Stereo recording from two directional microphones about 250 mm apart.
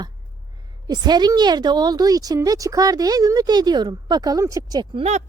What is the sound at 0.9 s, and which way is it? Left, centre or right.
A woman's voice, centre.